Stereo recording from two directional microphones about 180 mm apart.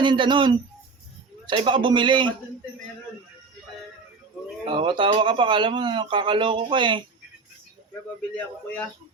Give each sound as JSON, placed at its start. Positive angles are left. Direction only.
{"t": 0.0, "sound": "speech", "side_deg": -25}
{"t": 4.6, "sound": "speech", "side_deg": -30}
{"t": 8.4, "sound": "a man's voice", "side_deg": 5}